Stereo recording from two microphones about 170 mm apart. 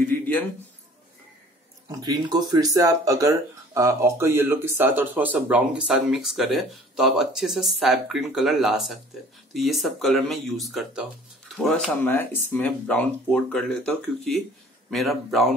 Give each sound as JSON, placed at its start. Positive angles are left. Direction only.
{"t": 1.9, "sound": "speech", "side_deg": -25}